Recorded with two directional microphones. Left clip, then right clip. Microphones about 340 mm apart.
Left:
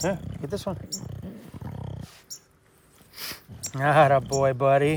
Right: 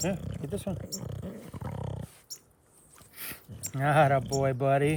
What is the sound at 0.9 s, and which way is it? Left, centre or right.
Dog, centre.